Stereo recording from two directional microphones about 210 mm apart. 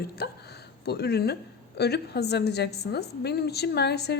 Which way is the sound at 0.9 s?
50° left (ahead or behind).